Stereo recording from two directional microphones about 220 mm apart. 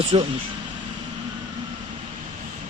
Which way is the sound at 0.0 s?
30° right (ahead or behind).